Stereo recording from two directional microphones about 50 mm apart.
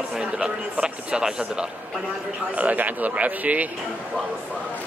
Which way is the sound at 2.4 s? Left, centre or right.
Right.